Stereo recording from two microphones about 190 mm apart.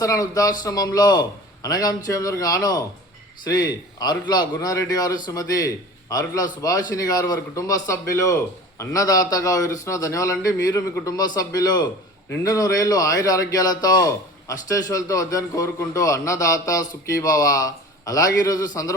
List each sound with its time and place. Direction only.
0.0 s a man's voice: 15° left (ahead or behind)